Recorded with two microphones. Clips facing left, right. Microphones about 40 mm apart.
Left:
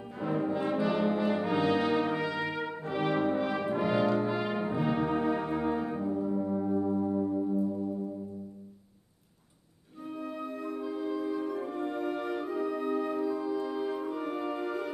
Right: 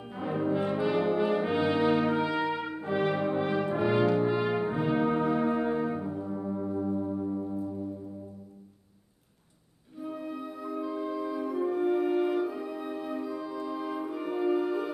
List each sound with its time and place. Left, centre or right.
0.1 s brass instrument: centre
4.7 s brass instrument: centre
5.0 s music: centre
5.9 s brass instrument: centre
6.5 s music: centre
10.2 s music: centre